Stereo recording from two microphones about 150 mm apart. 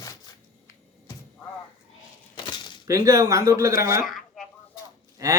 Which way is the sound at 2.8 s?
20° right (ahead or behind).